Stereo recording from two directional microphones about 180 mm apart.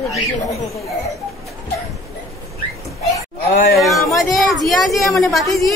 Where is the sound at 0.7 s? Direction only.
15° left (ahead or behind).